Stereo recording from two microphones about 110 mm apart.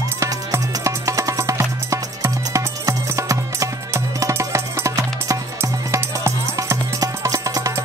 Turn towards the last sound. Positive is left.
turn(degrees=-30)  # may be behind; listen again after turning